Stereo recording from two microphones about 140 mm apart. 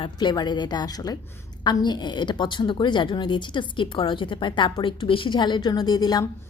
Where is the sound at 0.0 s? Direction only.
30° left (ahead or behind).